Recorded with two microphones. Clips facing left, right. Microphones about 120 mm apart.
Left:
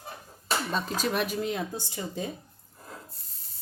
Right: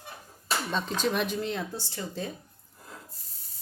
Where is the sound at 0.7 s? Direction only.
5° left (ahead or behind).